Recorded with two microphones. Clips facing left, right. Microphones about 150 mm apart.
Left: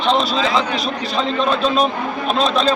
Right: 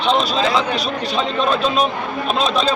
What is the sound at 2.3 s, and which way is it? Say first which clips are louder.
Speech: left 1 dB; 5° right (ahead or behind).